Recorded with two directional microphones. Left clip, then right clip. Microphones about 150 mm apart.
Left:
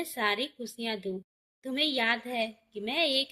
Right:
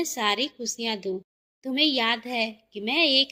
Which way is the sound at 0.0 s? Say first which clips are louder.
Right 5 dB; 20° right (ahead or behind).